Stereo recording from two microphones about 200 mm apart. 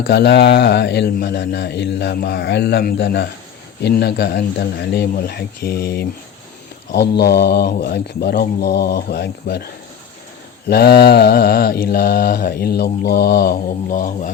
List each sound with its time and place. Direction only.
0.1 s speech: 55° left (ahead or behind)
3.8 s mantra: 55° left (ahead or behind)
10.7 s mantra: 55° left (ahead or behind)